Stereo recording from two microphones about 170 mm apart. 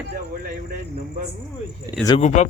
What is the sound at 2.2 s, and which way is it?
Speech, 40° left (ahead or behind).